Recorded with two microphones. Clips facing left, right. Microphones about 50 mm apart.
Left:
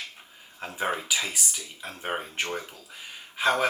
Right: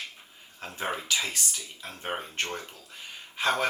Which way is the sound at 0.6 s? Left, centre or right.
Centre.